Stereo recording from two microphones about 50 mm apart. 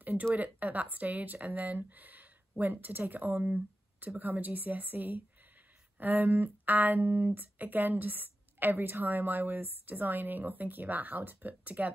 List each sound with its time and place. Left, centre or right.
0.0 s speech: right